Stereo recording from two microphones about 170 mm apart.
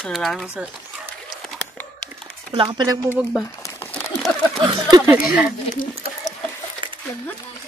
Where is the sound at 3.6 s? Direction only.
15° left (ahead or behind).